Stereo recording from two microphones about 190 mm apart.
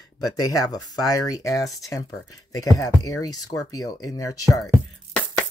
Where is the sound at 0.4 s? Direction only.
20° left (ahead or behind).